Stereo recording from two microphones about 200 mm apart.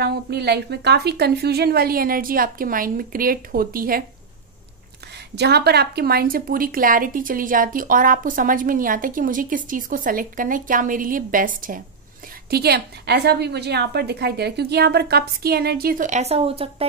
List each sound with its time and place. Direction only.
0.0 s a woman's voice: 55° right (ahead or behind)
5.3 s a woman's voice: 55° right (ahead or behind); by 16.8 s 30° right (ahead or behind)